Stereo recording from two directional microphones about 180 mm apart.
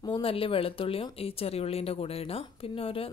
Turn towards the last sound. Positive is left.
turn(degrees=30)  # may be behind; listen again after turning